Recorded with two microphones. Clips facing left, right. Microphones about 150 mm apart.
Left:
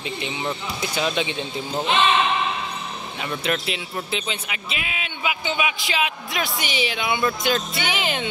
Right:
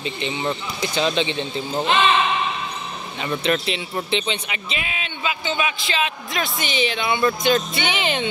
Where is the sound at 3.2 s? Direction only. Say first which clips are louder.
Right 4 dB; 5° left (ahead or behind).